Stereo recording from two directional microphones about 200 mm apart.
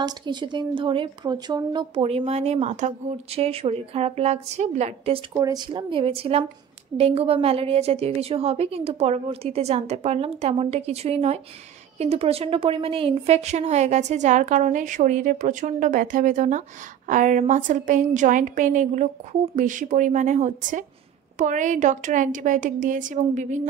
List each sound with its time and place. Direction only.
0.0 s a woman's voice: 20° right (ahead or behind)
5.3 s a woman's voice: 20° right (ahead or behind); by 23.6 s 35° right (ahead or behind)